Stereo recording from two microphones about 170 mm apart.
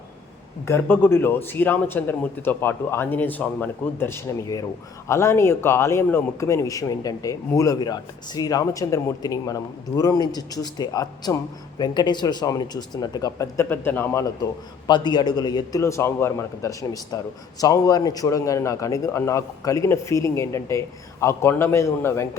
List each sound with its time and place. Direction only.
0.6 s a man's voice: 15° left (ahead or behind)
14.8 s a man's voice: 25° left (ahead or behind)